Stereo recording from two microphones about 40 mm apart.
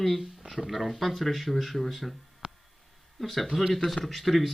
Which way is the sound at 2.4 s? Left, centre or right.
Right.